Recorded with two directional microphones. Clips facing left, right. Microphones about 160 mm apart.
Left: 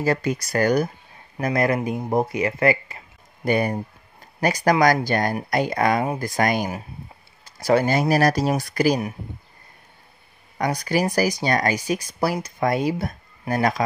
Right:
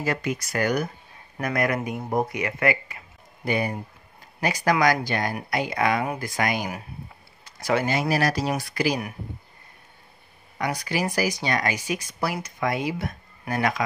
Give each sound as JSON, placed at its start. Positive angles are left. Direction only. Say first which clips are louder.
{"t": 0.0, "sound": "speech", "louder": "left 5 dB", "side_deg": 35}
{"t": 3.4, "sound": "a man's voice", "louder": "left 5 dB", "side_deg": 45}
{"t": 10.6, "sound": "speech", "louder": "left 4 dB", "side_deg": 40}